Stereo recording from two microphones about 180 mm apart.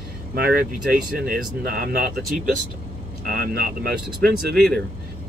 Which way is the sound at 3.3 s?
55° right (ahead or behind).